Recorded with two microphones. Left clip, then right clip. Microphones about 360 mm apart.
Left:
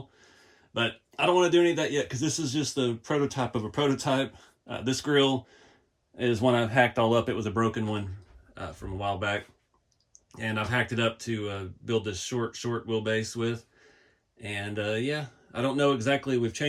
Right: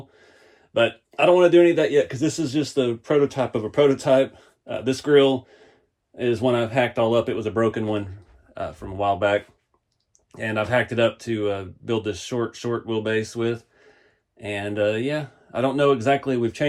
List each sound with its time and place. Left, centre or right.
0.7 s speech: centre
2.0 s speech: centre
2.3 s speech: centre